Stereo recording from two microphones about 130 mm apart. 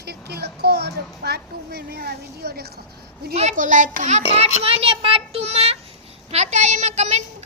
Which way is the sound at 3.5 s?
85° right.